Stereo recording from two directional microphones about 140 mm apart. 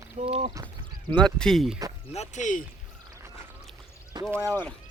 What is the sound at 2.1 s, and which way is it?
Speech, 55° left (ahead or behind).